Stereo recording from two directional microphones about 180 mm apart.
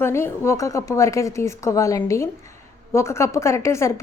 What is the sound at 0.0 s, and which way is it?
A woman's voice, 15° left (ahead or behind).